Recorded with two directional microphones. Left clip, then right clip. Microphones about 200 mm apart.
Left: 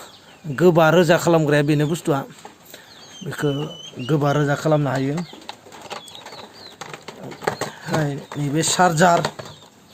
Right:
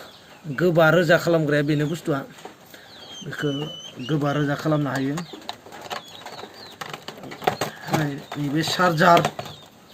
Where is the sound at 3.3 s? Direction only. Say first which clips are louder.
Left 3 dB; 50° left (ahead or behind).